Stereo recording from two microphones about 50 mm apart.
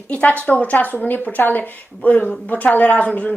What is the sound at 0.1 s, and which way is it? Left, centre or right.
A woman's voice, left.